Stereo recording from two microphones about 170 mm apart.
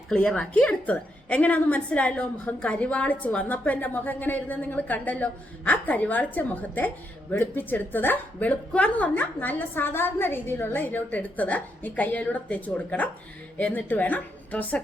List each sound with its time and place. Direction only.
0.1 s a woman's voice: 5° left (ahead or behind)